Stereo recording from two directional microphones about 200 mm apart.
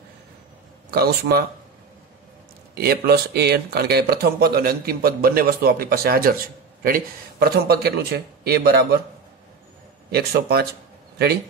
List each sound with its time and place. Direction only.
0.9 s speech: 50° right (ahead or behind)
2.7 s speech: 50° right (ahead or behind)
10.1 s speech: 50° right (ahead or behind)